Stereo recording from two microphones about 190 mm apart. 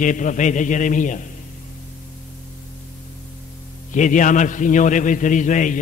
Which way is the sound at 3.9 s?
40° left (ahead or behind).